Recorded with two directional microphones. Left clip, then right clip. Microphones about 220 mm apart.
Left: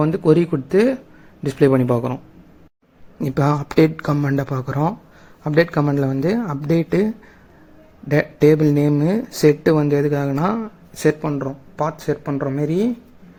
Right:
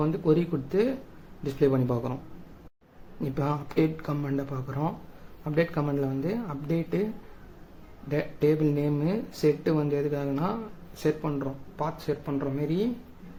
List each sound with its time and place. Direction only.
0.0 s speech: 30° left (ahead or behind)
3.2 s speech: 35° left (ahead or behind)
8.0 s speech: 35° left (ahead or behind)